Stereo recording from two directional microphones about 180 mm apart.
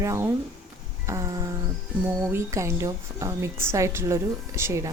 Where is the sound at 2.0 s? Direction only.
15° right (ahead or behind).